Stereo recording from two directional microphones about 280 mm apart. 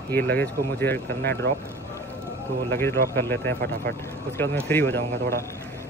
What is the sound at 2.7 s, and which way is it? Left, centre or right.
Speech, centre.